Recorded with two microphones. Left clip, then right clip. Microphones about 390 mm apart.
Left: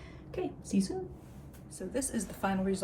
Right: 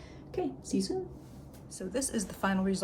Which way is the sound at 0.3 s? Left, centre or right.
Centre.